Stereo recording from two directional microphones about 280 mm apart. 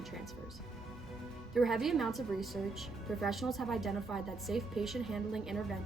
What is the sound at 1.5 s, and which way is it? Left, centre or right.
A woman's voice, centre.